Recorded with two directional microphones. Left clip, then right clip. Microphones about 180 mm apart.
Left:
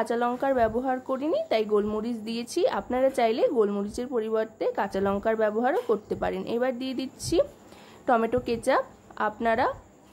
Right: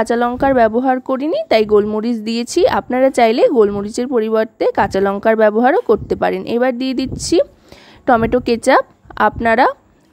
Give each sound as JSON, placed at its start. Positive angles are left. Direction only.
{"t": 0.0, "sound": "speech", "side_deg": -45}